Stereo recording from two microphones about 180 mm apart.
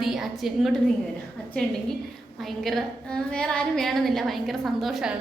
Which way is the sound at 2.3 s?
Centre (ahead or behind).